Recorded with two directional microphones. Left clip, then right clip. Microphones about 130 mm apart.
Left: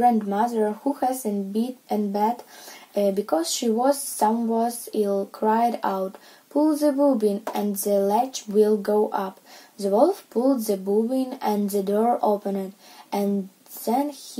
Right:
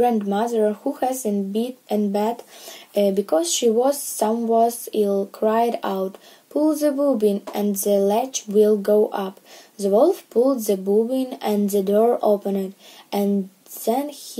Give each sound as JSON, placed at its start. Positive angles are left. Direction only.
{"t": 0.0, "sound": "speech", "side_deg": -15}